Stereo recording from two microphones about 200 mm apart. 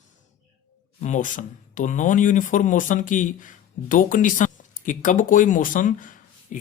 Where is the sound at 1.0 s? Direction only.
40° left (ahead or behind).